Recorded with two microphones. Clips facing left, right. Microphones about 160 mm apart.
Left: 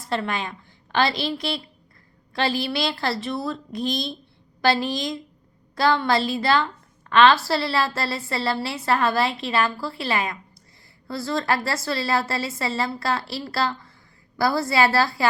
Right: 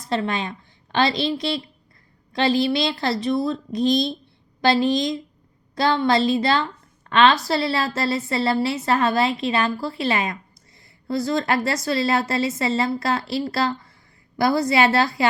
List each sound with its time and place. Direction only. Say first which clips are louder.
0.0 s a woman's voice: right 2 dB; 20° right (ahead or behind)